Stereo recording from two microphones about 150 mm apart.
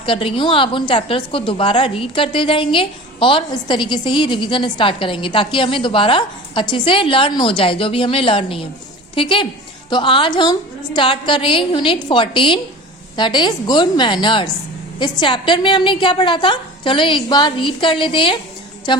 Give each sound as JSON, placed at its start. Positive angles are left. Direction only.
{"t": 0.0, "sound": "a woman's voice", "side_deg": 35}